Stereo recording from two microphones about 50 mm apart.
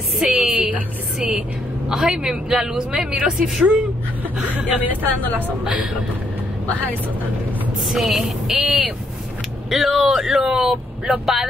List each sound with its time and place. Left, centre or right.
0.2 s speech: centre
0.6 s a woman's voice: right
1.9 s a woman's voice: centre
3.3 s speech: centre
4.4 s speech: right
5.6 s a woman's voice: right
7.9 s speech: centre